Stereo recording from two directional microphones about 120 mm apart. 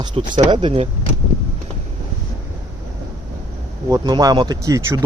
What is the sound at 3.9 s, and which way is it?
Speech, 30° right (ahead or behind).